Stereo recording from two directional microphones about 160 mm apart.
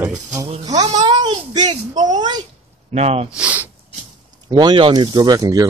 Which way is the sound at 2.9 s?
40° right (ahead or behind).